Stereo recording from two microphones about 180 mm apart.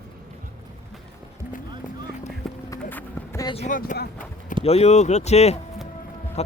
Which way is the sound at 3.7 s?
50° left (ahead or behind).